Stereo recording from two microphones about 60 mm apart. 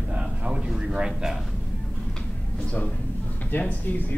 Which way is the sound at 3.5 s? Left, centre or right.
Left.